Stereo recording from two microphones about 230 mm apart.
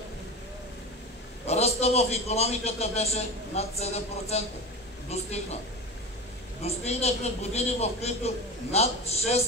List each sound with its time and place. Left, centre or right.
1.4 s a man's voice: left
6.6 s a man's voice: left